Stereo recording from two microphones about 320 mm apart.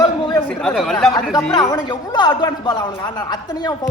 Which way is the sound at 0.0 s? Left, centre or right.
Centre.